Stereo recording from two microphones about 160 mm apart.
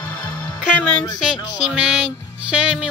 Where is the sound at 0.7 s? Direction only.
5° right (ahead or behind).